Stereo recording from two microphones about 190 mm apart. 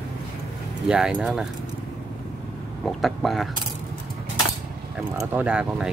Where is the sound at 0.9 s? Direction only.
5° right (ahead or behind).